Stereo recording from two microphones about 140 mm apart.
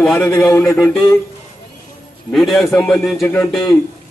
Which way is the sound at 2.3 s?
Centre (ahead or behind).